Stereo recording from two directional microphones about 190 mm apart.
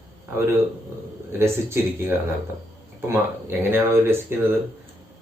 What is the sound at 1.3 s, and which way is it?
Speech, 15° right (ahead or behind).